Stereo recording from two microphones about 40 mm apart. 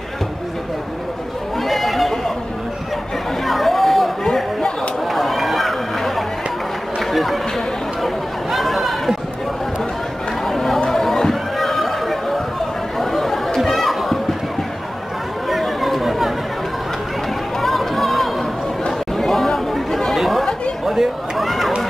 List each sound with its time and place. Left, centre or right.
1.6 s chatter: centre
3.4 s a sound: centre
5.0 s run: centre
7.0 s chatter: centre
10.4 s chatter: centre
10.9 s a sound: centre
13.0 s chatter: centre
15.4 s chatter: centre
17.6 s chatter: centre
20.8 s a sound: centre